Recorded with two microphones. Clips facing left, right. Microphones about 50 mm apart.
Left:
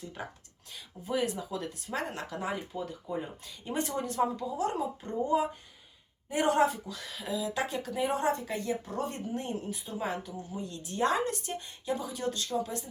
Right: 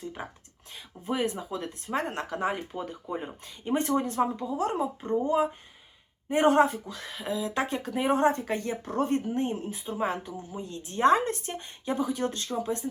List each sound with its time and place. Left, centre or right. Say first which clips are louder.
0.2 s speech: left 2 dB; centre
0.7 s speech: right 1 dB; right